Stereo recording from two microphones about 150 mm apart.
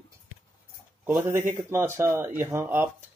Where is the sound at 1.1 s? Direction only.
15° right (ahead or behind).